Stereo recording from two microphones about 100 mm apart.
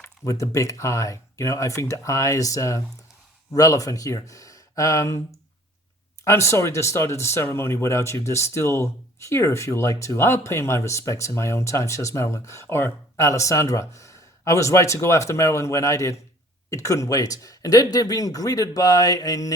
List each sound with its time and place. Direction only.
0.0 s a sound: 30° left (ahead or behind)
0.5 s speech: 30° left (ahead or behind)
6.2 s speech: 30° left (ahead or behind)